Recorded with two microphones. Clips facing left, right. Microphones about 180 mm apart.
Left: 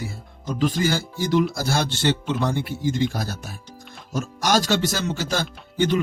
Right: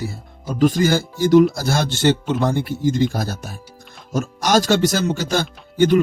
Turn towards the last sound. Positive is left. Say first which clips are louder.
# right 6 dB
turn(degrees=-45)  # may be behind; listen again after turning